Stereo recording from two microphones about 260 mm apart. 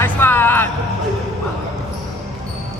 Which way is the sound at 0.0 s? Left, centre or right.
Centre.